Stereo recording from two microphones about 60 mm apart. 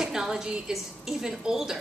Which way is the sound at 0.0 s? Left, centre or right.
Centre.